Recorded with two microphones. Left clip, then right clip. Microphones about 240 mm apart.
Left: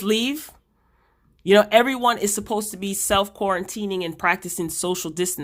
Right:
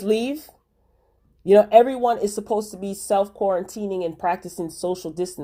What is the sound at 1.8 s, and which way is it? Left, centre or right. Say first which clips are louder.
Speech: right 1 dB; left.